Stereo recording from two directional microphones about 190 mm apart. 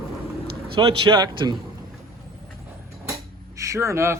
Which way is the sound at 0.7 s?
25° right (ahead or behind).